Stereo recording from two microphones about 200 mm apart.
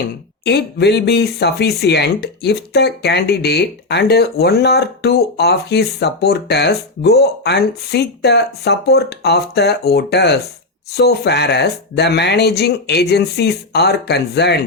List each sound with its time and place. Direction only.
0.4 s speech: 55° left (ahead or behind)